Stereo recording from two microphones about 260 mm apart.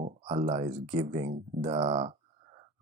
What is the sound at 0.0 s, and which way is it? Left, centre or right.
Speech, right.